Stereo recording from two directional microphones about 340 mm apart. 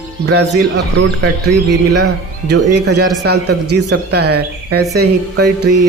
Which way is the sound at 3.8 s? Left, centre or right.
Right.